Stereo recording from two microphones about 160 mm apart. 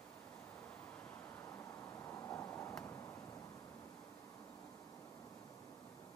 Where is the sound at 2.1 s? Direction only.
15° left (ahead or behind).